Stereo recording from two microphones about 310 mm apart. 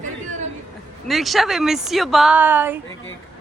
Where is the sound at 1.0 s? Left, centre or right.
Centre.